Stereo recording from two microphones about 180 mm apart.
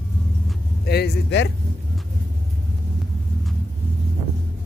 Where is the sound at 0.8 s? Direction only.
65° left (ahead or behind).